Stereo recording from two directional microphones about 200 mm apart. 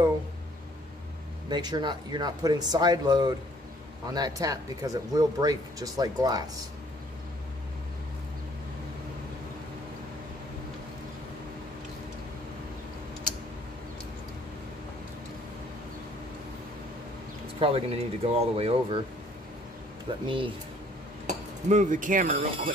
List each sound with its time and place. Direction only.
1.5 s speech: 20° right (ahead or behind)
17.6 s speech: 30° right (ahead or behind)
20.2 s speech: 25° right (ahead or behind)
21.3 s speech: 35° right (ahead or behind)